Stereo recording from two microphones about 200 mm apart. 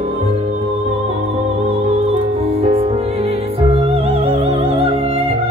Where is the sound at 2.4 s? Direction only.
30° right (ahead or behind).